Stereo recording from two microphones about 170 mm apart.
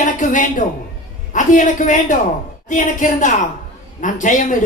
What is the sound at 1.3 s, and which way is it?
A woman's voice, 50° left (ahead or behind).